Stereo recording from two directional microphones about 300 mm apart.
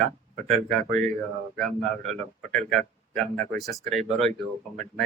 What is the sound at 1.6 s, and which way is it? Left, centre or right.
Speech, centre.